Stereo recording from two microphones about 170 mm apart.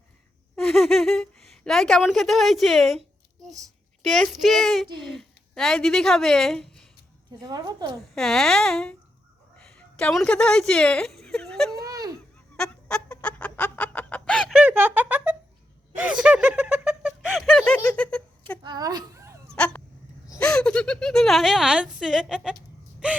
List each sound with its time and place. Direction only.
0.5 s speech: centre (ahead or behind)
4.0 s a woman's voice: centre (ahead or behind)
7.4 s a woman's voice: 20° right (ahead or behind)
8.1 s speech: centre (ahead or behind)
10.0 s speech: 5° left (ahead or behind)
11.9 s a sound: 20° right (ahead or behind)
12.5 s chicken: 5° left (ahead or behind)
16.0 s laughter: 5° right (ahead or behind)
17.8 s a sound: 5° left (ahead or behind)
18.6 s a sound: 25° right (ahead or behind)
19.5 s a sound: 5° left (ahead or behind)
20.4 s a woman's voice: 5° left (ahead or behind)